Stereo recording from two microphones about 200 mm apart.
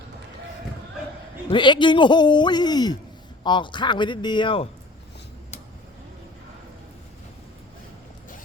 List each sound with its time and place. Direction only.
1.5 s a man's voice: 25° left (ahead or behind)